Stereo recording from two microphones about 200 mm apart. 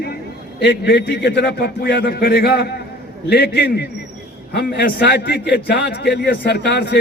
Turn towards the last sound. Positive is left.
turn(degrees=55)  # may be behind; listen again after turning